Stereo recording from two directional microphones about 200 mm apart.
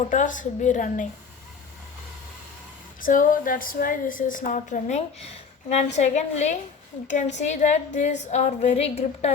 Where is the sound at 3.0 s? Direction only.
45° left (ahead or behind).